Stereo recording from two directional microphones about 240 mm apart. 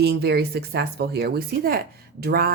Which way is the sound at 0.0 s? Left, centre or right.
Right.